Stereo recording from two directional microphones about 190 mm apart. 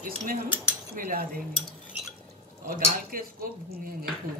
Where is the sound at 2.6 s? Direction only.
50° right (ahead or behind).